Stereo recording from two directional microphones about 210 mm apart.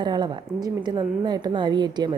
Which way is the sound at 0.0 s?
20° right (ahead or behind).